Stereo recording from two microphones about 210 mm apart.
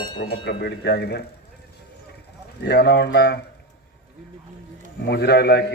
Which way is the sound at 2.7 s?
50° left (ahead or behind).